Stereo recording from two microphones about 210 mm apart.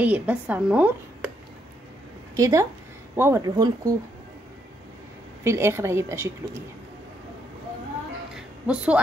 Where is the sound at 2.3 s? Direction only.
15° right (ahead or behind).